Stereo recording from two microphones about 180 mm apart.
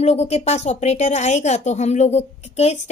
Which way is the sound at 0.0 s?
35° left (ahead or behind).